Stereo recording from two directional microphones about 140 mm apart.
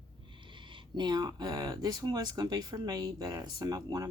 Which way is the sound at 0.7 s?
30° right (ahead or behind).